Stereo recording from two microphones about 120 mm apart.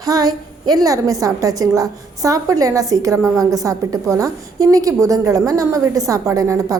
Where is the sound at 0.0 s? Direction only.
30° right (ahead or behind).